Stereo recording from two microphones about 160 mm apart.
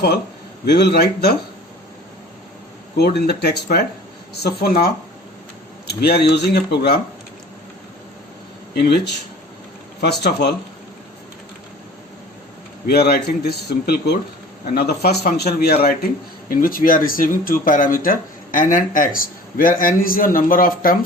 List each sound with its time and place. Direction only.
0.6 s a man's voice: 90° left
3.0 s speech: 85° left
5.9 s speech: 80° left
6.3 s a man's voice: 90° left
8.7 s a man's voice: 85° left
12.9 s a man's voice: 85° left
16.5 s speech: 60° left (ahead or behind)